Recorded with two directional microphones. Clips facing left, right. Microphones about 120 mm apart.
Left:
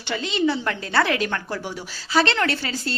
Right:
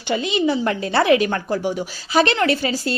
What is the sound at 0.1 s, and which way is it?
A woman's voice, 15° right (ahead or behind).